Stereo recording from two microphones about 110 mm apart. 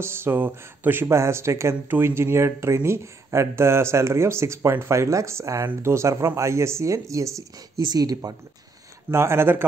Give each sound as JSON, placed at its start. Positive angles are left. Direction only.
{"t": 0.0, "sound": "speech", "side_deg": -20}
{"t": 9.1, "sound": "speech", "side_deg": -25}